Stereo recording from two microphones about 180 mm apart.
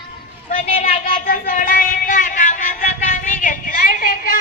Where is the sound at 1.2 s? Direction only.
55° left (ahead or behind).